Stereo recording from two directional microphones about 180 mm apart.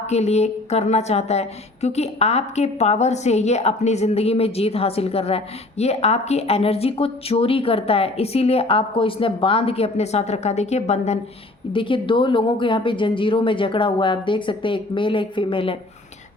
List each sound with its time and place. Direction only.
0.1 s speech: 35° left (ahead or behind)
11.7 s speech: 30° left (ahead or behind)